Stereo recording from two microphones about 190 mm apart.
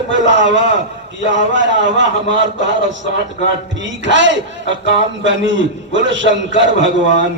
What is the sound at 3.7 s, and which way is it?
Speech, 75° right (ahead or behind).